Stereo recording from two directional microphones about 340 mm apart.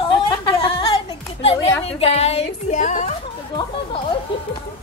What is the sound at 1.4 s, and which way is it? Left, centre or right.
A woman's voice, centre.